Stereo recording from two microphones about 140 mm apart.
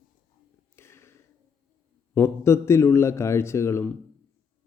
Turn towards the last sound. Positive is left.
turn(degrees=20)  # may be behind; listen again after turning